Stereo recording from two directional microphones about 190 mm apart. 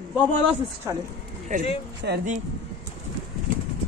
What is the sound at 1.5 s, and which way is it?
Speech, 40° right (ahead or behind).